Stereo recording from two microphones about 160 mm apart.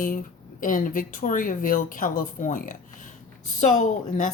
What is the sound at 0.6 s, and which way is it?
Speech, 55° left (ahead or behind).